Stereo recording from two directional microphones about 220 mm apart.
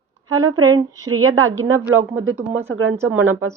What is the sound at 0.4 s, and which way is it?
A woman's voice, 75° right (ahead or behind).